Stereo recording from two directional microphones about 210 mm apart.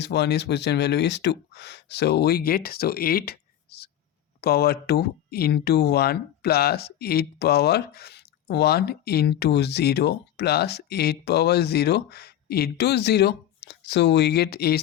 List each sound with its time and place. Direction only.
0.0 s speech: 50° left (ahead or behind)